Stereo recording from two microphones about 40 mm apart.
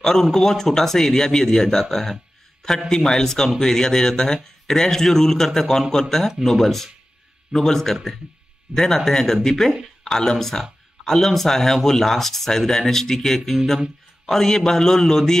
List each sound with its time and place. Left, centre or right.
0.0 s a man's voice: centre